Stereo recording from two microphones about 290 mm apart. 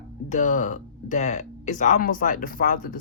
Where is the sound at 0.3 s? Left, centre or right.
Left.